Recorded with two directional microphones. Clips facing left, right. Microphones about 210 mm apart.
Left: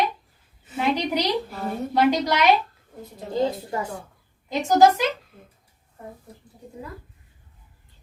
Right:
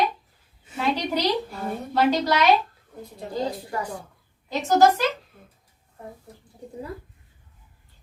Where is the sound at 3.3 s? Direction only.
25° left (ahead or behind).